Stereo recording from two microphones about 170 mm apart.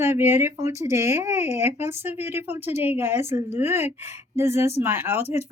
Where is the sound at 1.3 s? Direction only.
40° left (ahead or behind).